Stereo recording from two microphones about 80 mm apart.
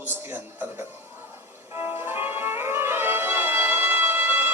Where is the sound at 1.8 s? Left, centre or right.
Right.